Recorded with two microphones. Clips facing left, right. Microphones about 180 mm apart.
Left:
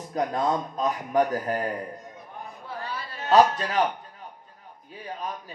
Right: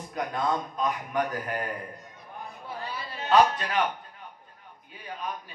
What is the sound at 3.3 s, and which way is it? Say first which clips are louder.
Speech: left 2 dB; 40° left (ahead or behind).